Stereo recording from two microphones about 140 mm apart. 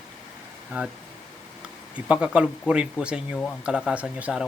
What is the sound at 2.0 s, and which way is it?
Speech, 10° right (ahead or behind).